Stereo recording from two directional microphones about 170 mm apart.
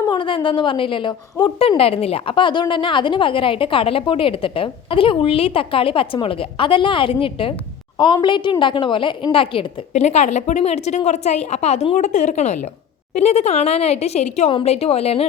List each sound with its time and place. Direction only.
0.1 s a woman's voice: 30° left (ahead or behind)